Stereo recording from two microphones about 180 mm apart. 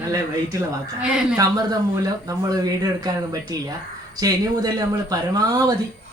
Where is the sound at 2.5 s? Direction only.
20° right (ahead or behind).